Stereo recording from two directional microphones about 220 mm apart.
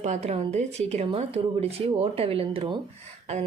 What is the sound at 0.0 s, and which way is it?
Speech, 30° right (ahead or behind).